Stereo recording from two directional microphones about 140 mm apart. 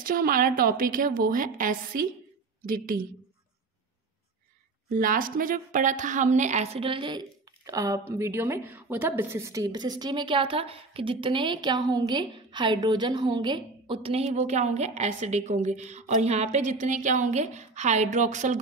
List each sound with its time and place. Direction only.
0.0 s a woman's voice: 90° right
2.6 s a woman's voice: 90° right
4.9 s a woman's voice: 75° right (ahead or behind); by 18.6 s 60° right (ahead or behind)